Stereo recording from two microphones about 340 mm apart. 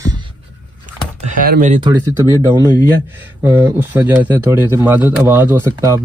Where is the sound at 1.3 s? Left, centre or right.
Right.